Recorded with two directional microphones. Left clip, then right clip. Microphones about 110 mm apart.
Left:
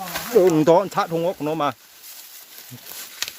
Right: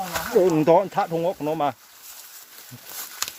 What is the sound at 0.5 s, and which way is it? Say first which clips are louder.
Speech: left 2 dB; 35° left (ahead or behind).